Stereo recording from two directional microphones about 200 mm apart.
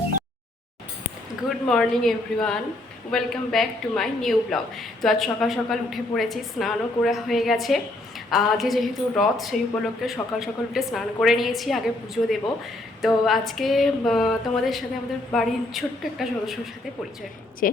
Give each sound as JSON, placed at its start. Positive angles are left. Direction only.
{"t": 1.5, "sound": "speech", "side_deg": 5}
{"t": 13.0, "sound": "speech", "side_deg": 0}
{"t": 17.6, "sound": "a woman's voice", "side_deg": 45}